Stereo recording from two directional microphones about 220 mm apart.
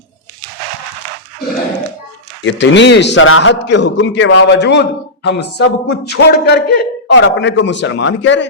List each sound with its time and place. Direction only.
2.4 s a man's voice: 55° left (ahead or behind)